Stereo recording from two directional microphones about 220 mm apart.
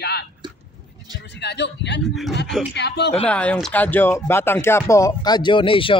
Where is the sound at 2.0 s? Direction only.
Centre (ahead or behind).